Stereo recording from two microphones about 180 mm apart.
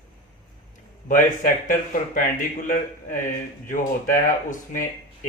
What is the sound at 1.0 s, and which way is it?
Speech, 45° left (ahead or behind).